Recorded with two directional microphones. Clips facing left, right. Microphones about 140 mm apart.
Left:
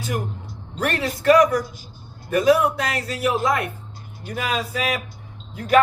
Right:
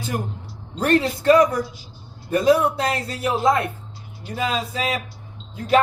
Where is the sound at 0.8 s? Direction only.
30° right (ahead or behind).